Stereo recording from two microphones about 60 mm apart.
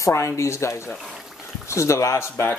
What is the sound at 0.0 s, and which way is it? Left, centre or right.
Speech, left.